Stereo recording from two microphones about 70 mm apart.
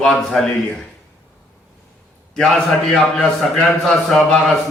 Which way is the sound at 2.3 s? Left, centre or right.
Centre.